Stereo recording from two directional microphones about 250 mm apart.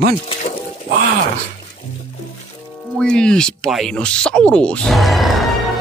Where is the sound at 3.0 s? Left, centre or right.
Centre.